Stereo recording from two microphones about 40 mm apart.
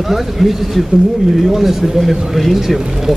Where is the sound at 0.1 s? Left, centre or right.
Centre.